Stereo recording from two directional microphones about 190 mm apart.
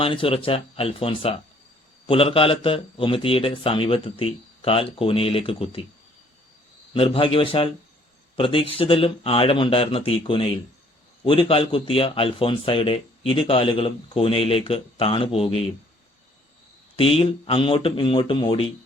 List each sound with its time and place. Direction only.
0.0 s a man's voice: 30° left (ahead or behind)
6.9 s a man's voice: 30° left (ahead or behind)
17.0 s a man's voice: 30° left (ahead or behind)